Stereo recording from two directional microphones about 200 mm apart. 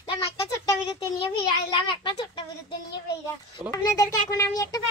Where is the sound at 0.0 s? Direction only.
25° left (ahead or behind).